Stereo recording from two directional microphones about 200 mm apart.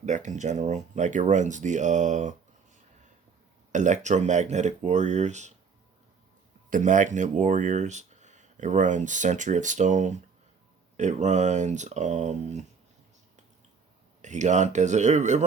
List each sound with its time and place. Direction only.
0.0 s speech: 35° right (ahead or behind)
3.7 s speech: 40° right (ahead or behind)
6.7 s speech: 40° right (ahead or behind)
14.2 s speech: 35° right (ahead or behind)